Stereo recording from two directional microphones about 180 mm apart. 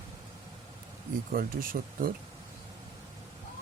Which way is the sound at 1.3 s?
50° right (ahead or behind).